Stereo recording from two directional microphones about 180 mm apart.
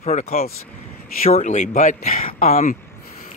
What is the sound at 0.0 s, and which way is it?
Speech, 35° left (ahead or behind).